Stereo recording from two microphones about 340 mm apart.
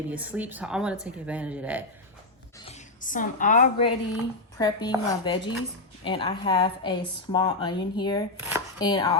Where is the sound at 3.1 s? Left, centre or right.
Left.